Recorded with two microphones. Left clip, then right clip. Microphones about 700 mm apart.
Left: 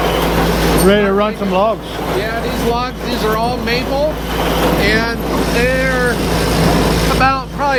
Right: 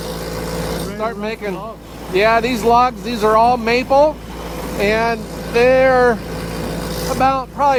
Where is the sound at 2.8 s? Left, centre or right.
Right.